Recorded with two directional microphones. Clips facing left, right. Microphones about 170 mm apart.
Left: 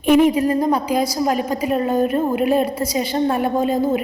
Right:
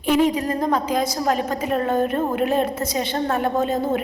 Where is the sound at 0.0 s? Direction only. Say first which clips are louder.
Left 5 dB; 15° left (ahead or behind).